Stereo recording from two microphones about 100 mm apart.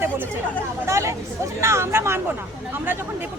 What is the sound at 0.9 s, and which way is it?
Speech, 30° right (ahead or behind).